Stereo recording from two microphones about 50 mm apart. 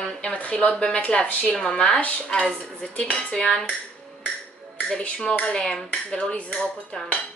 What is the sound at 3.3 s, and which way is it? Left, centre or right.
Dishes, centre.